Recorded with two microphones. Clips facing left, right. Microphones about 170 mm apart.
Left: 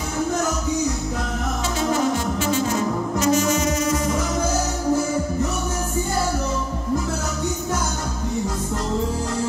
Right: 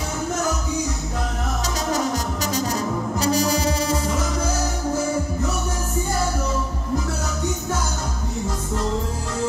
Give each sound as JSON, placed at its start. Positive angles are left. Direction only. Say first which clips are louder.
{"t": 2.4, "sound": "music", "louder": "left 3 dB", "side_deg": -40}